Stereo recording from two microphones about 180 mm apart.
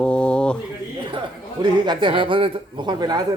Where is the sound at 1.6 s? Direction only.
25° right (ahead or behind).